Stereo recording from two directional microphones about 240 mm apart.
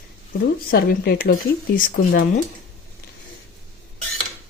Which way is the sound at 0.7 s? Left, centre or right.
Left.